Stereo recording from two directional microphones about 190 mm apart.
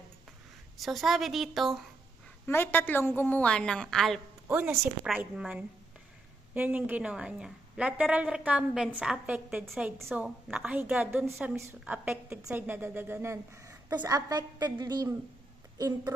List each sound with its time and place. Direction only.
0.8 s a woman's voice: centre (ahead or behind)
2.5 s a woman's voice: 10° left (ahead or behind)
4.4 s a woman's voice: 10° right (ahead or behind)
5.0 s a woman's voice: centre (ahead or behind); by 16.1 s 20° right (ahead or behind)